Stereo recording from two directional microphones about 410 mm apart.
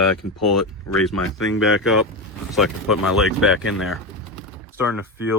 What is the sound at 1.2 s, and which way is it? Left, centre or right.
Speech, left.